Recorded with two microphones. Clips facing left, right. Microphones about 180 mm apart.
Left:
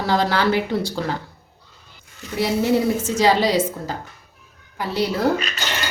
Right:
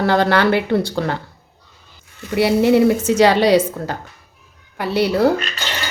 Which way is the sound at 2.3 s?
65° right (ahead or behind).